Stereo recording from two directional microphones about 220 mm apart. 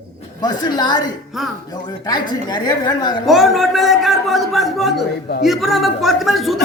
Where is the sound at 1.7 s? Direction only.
20° left (ahead or behind).